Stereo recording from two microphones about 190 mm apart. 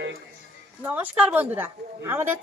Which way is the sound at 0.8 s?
10° right (ahead or behind).